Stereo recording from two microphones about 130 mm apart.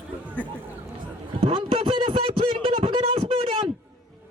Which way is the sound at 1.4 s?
45° right (ahead or behind).